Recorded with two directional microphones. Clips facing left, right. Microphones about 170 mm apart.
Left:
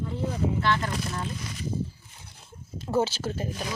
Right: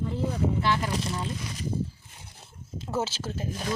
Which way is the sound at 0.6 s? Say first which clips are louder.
Even; 10° right (ahead or behind).